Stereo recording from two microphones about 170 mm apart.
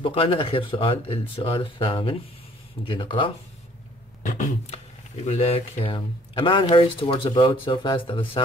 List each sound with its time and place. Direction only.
0.0 s speech: 30° left (ahead or behind)
4.2 s speech: 45° left (ahead or behind); by 8.4 s 30° left (ahead or behind)